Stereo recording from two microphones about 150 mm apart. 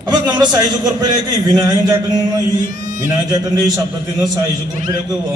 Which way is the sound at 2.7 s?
60° right (ahead or behind).